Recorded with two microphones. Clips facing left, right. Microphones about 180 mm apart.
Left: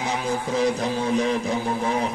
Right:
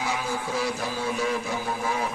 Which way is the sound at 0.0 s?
20° left (ahead or behind).